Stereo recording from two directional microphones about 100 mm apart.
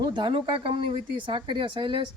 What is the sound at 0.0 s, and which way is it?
Speech, 50° right (ahead or behind).